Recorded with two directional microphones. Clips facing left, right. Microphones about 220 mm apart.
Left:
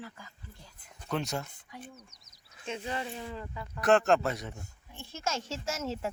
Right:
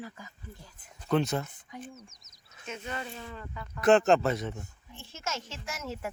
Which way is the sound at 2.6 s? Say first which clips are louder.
Left 2 dB; 30° left (ahead or behind).